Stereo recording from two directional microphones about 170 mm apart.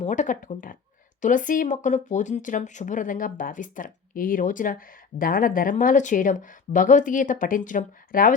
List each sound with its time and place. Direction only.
0.0 s speech: 45° left (ahead or behind)